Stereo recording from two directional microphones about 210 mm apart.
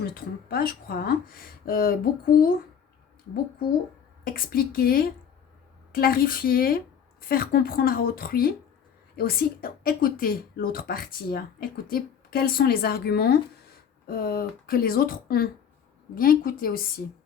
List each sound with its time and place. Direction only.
0.0 s speech: 45° left (ahead or behind)
4.2 s speech: 45° left (ahead or behind)